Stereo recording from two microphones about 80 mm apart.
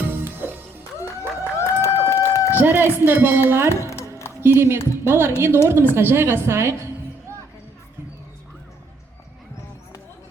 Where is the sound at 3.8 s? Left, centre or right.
Left.